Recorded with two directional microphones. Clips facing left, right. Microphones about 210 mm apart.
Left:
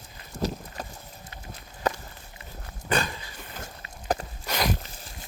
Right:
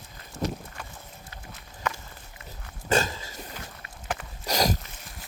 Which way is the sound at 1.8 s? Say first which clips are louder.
Left 5 dB; 35° left (ahead or behind).